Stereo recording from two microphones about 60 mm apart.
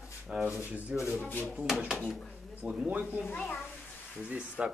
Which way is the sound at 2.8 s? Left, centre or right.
Right.